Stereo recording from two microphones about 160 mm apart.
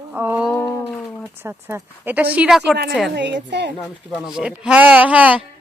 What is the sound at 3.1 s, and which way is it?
Speech, 90° right.